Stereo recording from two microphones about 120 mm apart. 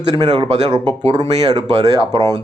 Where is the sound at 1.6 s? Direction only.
35° right (ahead or behind).